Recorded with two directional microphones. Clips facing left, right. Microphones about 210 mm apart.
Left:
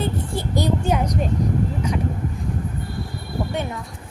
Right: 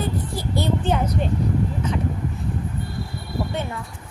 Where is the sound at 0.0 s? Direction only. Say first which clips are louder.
Left 1 dB; 20° left (ahead or behind).